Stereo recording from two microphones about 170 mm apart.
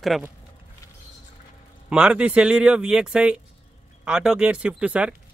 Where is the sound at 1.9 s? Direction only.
5° right (ahead or behind).